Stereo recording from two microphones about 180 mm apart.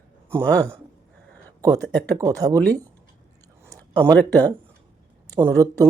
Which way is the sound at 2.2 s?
20° right (ahead or behind).